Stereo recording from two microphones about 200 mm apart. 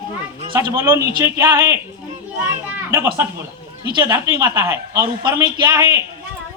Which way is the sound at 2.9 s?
10° right (ahead or behind).